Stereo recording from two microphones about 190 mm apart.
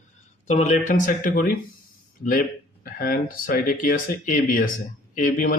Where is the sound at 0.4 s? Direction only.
40° left (ahead or behind).